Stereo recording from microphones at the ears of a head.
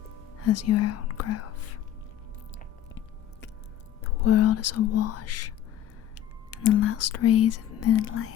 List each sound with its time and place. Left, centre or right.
0.4 s speech: left
4.0 s speech: left